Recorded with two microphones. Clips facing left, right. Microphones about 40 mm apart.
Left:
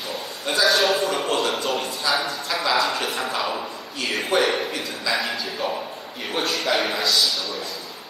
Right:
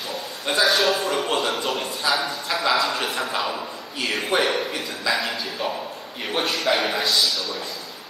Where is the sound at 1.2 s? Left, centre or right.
Centre.